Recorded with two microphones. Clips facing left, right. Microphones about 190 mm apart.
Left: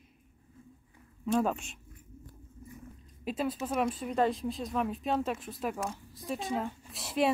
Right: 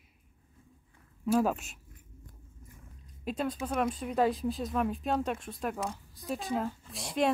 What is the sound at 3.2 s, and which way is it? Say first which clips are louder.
Speech: even; 5° left (ahead or behind).